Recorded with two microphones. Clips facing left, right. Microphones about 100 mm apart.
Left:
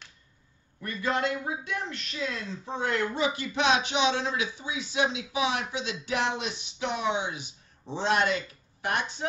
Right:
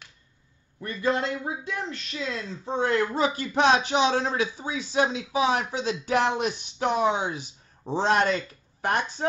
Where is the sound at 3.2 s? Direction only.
40° right (ahead or behind).